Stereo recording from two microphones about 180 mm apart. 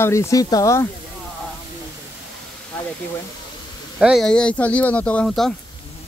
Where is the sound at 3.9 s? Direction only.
Centre (ahead or behind).